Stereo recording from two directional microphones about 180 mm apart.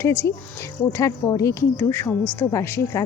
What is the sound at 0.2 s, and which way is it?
A woman's voice, 15° left (ahead or behind).